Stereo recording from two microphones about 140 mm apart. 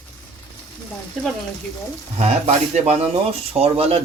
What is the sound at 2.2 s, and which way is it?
Speech, 50° right (ahead or behind).